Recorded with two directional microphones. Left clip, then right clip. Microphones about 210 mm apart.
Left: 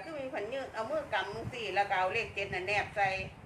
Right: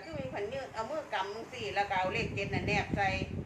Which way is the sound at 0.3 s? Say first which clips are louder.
Even; 10° left (ahead or behind).